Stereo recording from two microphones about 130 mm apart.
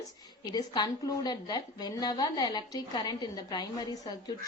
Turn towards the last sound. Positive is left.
turn(degrees=30)  # may be behind; listen again after turning